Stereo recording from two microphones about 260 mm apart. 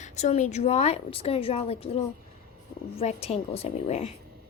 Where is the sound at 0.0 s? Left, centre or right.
Left.